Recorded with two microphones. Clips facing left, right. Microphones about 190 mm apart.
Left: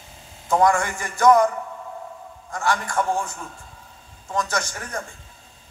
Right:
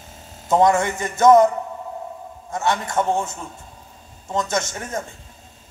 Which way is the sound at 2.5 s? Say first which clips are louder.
Right 2 dB; 20° right (ahead or behind).